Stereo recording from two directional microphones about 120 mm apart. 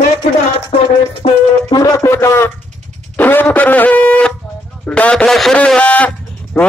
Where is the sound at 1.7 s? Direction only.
30° left (ahead or behind).